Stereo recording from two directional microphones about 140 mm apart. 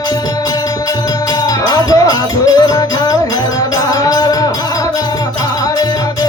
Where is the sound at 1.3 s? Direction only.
25° left (ahead or behind).